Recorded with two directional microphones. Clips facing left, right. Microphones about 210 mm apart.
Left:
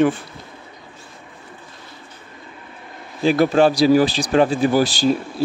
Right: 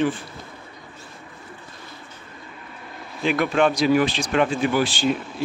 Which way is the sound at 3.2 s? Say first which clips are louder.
Left 5 dB; 35° left (ahead or behind).